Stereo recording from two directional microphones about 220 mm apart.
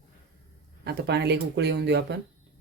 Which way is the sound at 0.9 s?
50° right (ahead or behind).